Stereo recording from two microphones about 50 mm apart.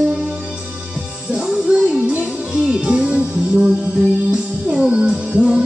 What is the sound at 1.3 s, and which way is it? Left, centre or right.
Music, centre.